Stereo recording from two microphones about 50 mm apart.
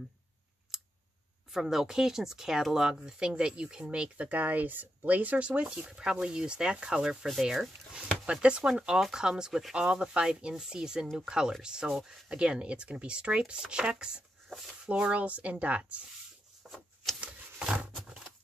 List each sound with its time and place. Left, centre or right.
0.7 s scissors: centre
1.5 s speech: centre
4.3 s speech: right
5.6 s speech: centre
7.2 s speech: centre
7.9 s speech: centre
16.6 s a sound: centre
17.2 s a sound: right